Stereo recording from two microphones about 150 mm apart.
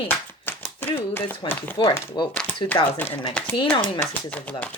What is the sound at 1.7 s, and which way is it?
Speech, 30° left (ahead or behind).